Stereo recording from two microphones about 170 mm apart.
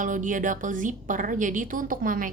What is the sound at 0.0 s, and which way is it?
A woman's voice, 50° right (ahead or behind).